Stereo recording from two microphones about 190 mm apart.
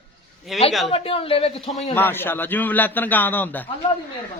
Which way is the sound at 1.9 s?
10° left (ahead or behind).